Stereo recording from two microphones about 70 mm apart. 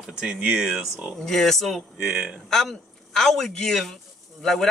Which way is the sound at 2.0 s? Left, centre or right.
Centre.